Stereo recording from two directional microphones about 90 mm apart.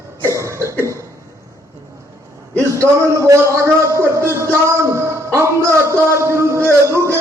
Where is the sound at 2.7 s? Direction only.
35° right (ahead or behind).